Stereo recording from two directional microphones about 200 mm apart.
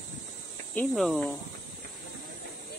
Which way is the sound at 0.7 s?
Centre (ahead or behind).